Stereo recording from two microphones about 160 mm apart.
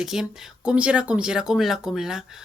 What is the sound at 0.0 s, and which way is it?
Speech, centre (ahead or behind).